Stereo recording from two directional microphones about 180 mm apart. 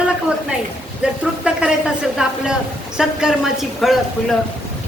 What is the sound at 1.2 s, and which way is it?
A man's voice, 5° right (ahead or behind).